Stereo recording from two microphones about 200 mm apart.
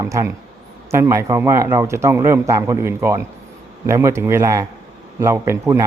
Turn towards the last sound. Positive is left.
turn(degrees=-15)  # may be behind; listen again after turning